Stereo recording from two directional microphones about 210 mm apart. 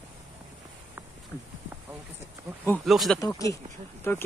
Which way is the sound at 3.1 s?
15° left (ahead or behind).